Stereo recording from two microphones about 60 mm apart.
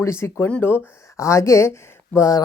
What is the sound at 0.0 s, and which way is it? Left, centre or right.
Speech, left.